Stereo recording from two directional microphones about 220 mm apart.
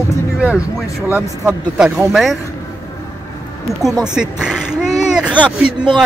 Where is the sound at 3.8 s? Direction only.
Centre (ahead or behind).